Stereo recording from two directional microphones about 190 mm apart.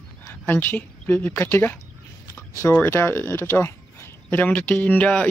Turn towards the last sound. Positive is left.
turn(degrees=10)  # may be behind; listen again after turning